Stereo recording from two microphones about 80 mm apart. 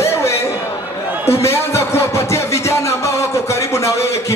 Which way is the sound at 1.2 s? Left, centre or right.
Left.